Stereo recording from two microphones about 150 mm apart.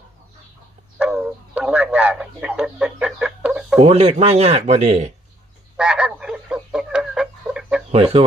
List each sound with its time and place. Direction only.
0.9 s a sound: 5° right (ahead or behind)
3.8 s speech: 45° right (ahead or behind)
5.7 s frog: 5° right (ahead or behind)
7.9 s speech: 40° right (ahead or behind)